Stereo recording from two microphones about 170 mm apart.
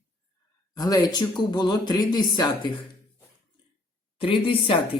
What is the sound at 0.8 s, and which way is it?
Speech, 20° left (ahead or behind).